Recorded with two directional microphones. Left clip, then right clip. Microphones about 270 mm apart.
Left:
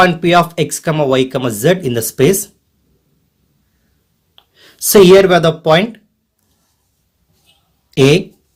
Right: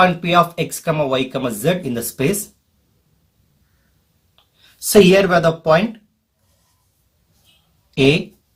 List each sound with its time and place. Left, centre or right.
0.0 s speech: left
4.9 s speech: left